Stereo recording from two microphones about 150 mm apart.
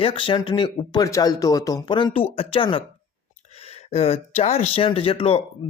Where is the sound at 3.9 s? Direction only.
45° left (ahead or behind).